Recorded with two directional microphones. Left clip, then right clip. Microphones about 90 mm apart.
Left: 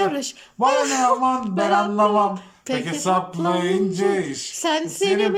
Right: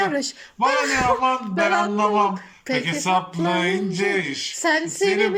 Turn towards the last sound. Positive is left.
turn(degrees=30)  # may be behind; listen again after turning